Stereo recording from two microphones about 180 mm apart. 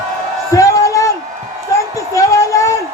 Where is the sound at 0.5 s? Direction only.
15° left (ahead or behind).